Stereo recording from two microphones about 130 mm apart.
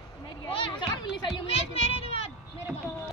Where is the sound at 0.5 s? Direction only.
40° left (ahead or behind).